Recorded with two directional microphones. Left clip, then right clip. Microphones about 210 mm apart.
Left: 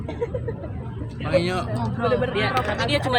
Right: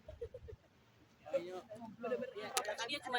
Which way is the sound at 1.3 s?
20° left (ahead or behind).